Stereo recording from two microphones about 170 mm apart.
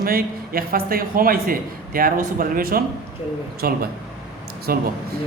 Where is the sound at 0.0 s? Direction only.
60° right (ahead or behind).